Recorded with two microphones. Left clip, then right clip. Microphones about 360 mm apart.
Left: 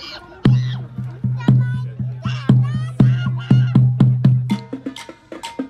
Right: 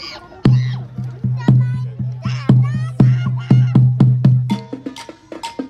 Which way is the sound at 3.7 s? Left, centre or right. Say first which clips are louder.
Right 2 dB; centre.